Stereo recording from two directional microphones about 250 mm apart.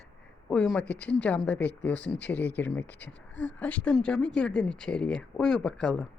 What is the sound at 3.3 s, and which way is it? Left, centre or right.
Speech, left.